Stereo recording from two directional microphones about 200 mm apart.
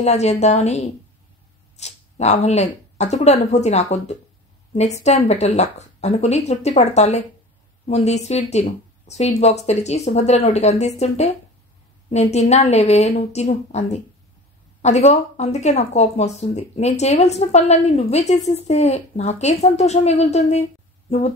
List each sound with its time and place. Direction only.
0.0 s speech: 35° left (ahead or behind)